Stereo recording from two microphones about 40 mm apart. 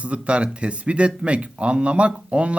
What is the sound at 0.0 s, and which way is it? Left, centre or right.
Speech, right.